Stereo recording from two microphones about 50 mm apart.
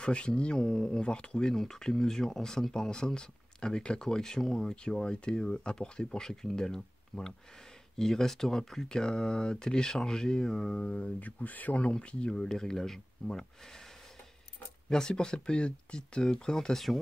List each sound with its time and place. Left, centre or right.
0.0 s speech: centre
1.5 s speech: centre; by 11.8 s left
11.8 s speech: left
14.9 s speech: centre